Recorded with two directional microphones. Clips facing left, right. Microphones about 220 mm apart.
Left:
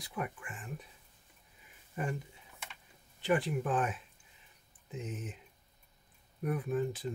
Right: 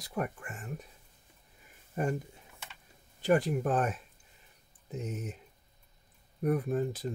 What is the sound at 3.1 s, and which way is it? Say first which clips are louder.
Speech: right 4 dB; 40° right (ahead or behind).